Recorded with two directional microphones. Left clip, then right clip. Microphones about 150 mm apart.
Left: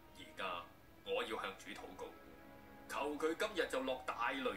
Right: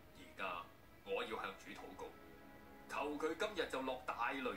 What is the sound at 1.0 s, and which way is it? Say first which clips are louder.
Music: left 2 dB; 30° left (ahead or behind).